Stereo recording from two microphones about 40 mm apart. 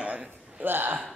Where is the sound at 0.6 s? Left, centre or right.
Right.